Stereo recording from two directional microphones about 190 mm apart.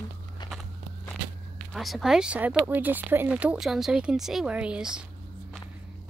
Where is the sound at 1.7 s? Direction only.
Centre (ahead or behind).